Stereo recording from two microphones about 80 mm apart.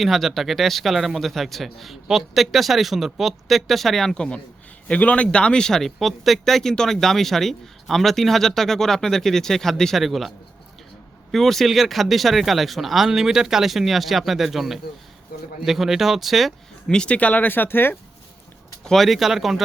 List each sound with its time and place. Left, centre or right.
0.0 s speech: centre
16.9 s speech: centre
18.9 s speech: centre